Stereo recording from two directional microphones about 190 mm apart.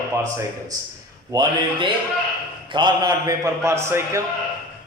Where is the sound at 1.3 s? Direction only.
20° right (ahead or behind).